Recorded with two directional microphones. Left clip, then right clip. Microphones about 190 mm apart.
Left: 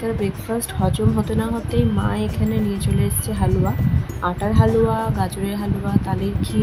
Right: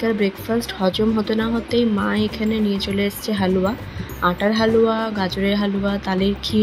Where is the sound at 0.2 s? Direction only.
Centre (ahead or behind).